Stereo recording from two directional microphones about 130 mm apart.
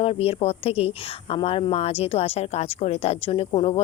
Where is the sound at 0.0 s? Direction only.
50° left (ahead or behind).